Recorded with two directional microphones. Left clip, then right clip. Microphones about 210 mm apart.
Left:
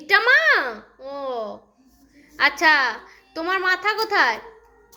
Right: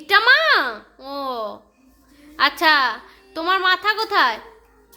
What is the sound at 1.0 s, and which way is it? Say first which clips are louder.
Babbling: right 2 dB; 30° right (ahead or behind).